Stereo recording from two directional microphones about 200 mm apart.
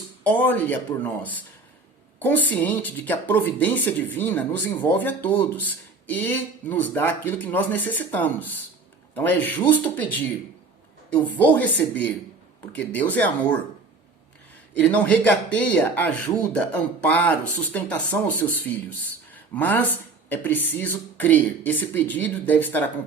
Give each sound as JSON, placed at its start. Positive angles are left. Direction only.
{"t": 0.3, "sound": "speech", "side_deg": 10}
{"t": 14.7, "sound": "speech", "side_deg": 5}